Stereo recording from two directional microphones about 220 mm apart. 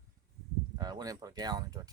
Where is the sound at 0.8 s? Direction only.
15° right (ahead or behind).